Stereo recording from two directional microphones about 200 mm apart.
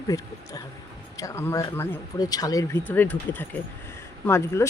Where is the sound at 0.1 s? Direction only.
15° left (ahead or behind).